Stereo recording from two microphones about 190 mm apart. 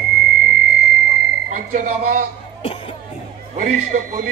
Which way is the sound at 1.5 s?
40° right (ahead or behind).